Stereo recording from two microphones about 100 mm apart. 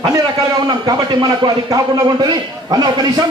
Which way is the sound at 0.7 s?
45° right (ahead or behind).